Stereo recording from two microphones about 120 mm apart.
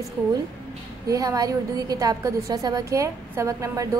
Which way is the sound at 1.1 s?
30° right (ahead or behind).